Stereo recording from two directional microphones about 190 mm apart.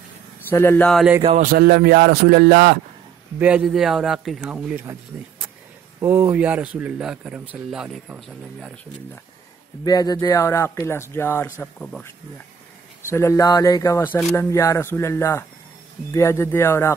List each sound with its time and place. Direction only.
0.5 s speech: 10° left (ahead or behind)
0.8 s speech: centre (ahead or behind)
1.4 s speech: 50° right (ahead or behind)
3.3 s speech: 5° right (ahead or behind)
5.9 s speech: 15° right (ahead or behind); by 9.2 s 5° left (ahead or behind)
9.8 s speech: 20° left (ahead or behind)
13.1 s speech: 15° left (ahead or behind)